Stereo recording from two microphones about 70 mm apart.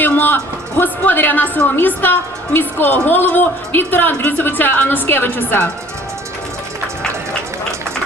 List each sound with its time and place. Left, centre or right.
0.0 s music: left
0.8 s a woman's voice: left